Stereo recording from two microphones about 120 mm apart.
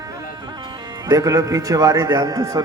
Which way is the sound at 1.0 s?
30° right (ahead or behind).